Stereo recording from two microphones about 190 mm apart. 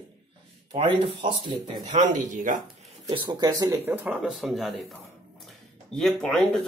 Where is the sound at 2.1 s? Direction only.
45° right (ahead or behind).